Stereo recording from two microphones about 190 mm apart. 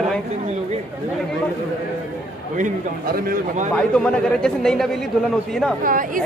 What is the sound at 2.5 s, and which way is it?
A man's voice, 45° right (ahead or behind).